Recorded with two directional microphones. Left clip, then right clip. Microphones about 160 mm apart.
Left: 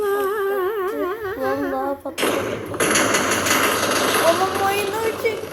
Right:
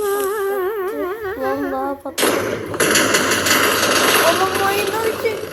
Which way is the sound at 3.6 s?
90° right.